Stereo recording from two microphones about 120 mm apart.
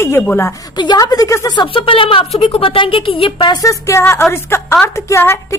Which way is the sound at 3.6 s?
25° left (ahead or behind).